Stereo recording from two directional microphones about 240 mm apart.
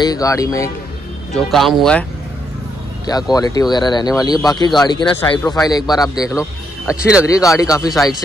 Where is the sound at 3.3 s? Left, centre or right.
Centre.